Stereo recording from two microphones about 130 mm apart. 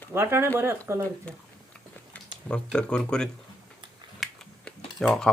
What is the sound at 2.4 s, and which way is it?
Speech, 10° left (ahead or behind).